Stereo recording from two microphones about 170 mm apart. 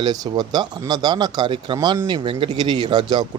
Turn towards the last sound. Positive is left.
turn(degrees=-25)  # may be behind; listen again after turning